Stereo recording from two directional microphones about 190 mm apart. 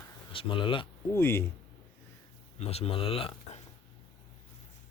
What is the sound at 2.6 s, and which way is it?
Speech, 30° left (ahead or behind).